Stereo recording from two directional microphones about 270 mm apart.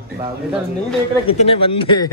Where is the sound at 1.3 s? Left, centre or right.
Left.